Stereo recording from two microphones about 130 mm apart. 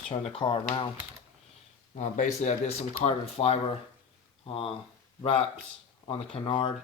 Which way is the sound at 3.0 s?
50° left (ahead or behind).